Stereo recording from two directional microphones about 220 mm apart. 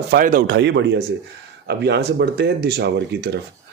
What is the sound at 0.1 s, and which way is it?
Speech, 40° right (ahead or behind).